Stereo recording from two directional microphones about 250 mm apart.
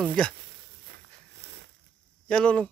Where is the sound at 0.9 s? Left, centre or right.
Right.